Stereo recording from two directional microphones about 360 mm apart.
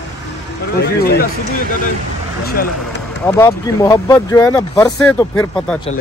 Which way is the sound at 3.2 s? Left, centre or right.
Centre.